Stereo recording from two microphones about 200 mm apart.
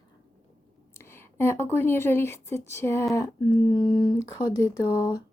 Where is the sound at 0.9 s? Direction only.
10° left (ahead or behind).